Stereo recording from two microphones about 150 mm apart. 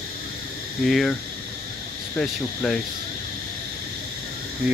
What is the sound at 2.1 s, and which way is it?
Speech, 5° left (ahead or behind).